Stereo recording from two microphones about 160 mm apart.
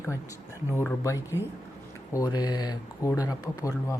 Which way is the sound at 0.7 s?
15° left (ahead or behind).